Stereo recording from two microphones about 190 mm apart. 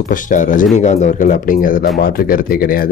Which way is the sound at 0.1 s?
45° left (ahead or behind).